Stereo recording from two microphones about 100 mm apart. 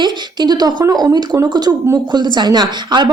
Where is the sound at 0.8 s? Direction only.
40° right (ahead or behind).